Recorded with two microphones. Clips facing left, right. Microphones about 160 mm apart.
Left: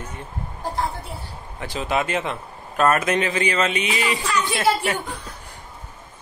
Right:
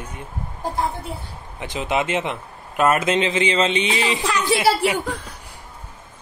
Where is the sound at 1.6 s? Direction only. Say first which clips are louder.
Right 1 dB; 20° right (ahead or behind).